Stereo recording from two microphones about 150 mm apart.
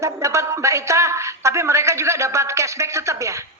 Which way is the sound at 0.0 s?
20° right (ahead or behind).